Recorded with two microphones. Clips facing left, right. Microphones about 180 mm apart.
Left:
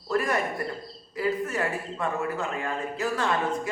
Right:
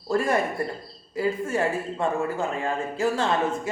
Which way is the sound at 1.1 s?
25° right (ahead or behind).